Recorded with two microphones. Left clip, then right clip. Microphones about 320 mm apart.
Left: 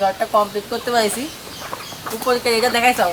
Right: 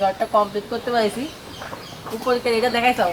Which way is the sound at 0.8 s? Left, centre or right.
Centre.